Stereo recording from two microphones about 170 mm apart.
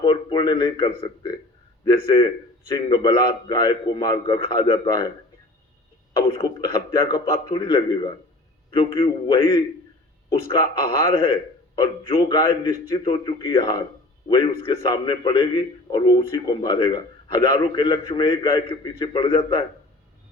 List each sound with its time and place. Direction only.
0.0 s a man's voice: 30° left (ahead or behind)
2.6 s a man's voice: 25° left (ahead or behind)
6.1 s a man's voice: 30° left (ahead or behind)